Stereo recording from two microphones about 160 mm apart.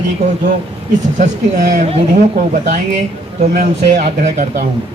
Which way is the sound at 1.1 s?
50° right (ahead or behind).